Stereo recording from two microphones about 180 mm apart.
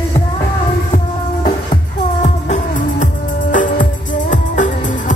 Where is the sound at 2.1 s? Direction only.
40° left (ahead or behind).